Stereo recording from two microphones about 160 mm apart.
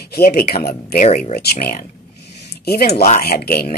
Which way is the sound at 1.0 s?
45° left (ahead or behind).